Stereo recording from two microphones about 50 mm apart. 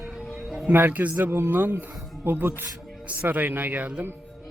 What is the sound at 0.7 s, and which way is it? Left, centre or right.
A man's voice, right.